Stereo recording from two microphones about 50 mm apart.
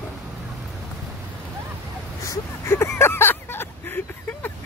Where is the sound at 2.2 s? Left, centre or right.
Left.